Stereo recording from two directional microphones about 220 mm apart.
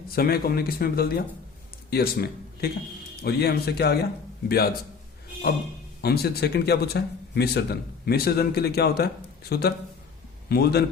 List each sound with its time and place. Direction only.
0.2 s a man's voice: 45° left (ahead or behind)
6.0 s speech: 45° left (ahead or behind)